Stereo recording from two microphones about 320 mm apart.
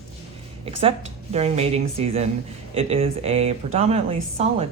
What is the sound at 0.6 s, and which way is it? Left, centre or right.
Speech, centre.